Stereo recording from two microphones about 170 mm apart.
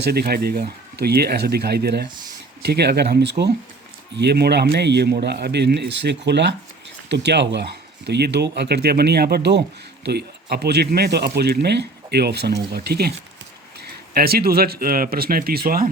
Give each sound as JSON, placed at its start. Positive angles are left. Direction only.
{"t": 0.0, "sound": "speech", "side_deg": -65}